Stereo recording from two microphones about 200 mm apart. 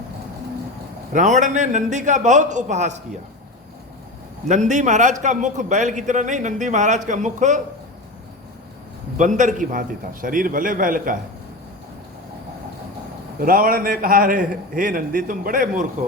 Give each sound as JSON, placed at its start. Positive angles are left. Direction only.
{"t": 1.1, "sound": "a man's voice", "side_deg": -35}
{"t": 4.4, "sound": "a man's voice", "side_deg": -35}
{"t": 9.1, "sound": "a man's voice", "side_deg": -40}
{"t": 13.4, "sound": "a man's voice", "side_deg": -45}